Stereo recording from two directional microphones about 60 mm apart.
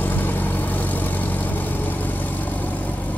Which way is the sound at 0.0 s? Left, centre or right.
Left.